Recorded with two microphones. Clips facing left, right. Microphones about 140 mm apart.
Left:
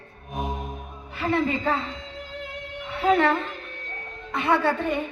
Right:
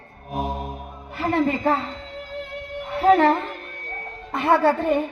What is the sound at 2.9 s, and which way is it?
Speech, 40° right (ahead or behind).